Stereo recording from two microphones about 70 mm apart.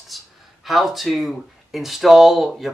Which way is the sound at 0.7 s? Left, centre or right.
Centre.